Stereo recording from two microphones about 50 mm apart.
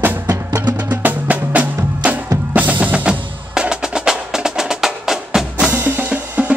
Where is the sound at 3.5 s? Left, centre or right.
Centre.